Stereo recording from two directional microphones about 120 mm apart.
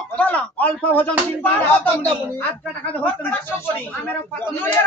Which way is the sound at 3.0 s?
15° left (ahead or behind).